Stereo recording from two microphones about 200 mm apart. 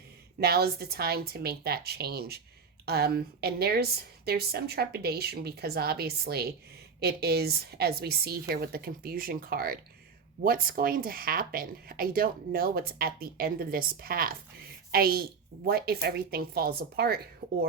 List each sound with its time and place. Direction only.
0.3 s speech: 50° right (ahead or behind)